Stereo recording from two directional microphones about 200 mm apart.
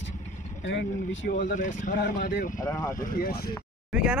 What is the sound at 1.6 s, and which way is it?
Speech, 40° left (ahead or behind).